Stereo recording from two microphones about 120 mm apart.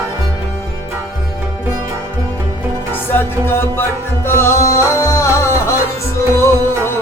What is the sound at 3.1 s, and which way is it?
Music, 20° left (ahead or behind).